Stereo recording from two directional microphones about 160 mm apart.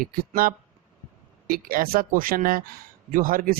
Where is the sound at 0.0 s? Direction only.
65° right (ahead or behind).